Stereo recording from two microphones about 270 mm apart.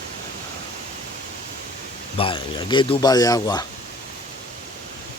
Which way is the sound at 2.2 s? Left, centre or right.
Centre.